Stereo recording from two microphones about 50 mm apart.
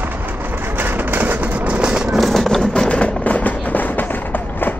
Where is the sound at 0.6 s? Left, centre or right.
Right; by 2.2 s centre.